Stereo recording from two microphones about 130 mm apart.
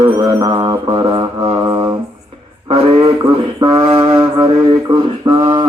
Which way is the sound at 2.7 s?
45° right (ahead or behind).